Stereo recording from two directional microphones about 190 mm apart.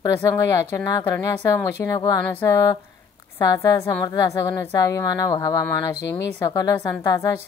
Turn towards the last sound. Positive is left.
turn(degrees=20)  # may be behind; listen again after turning